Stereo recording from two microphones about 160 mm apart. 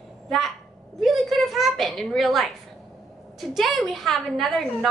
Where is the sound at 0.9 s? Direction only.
Centre (ahead or behind).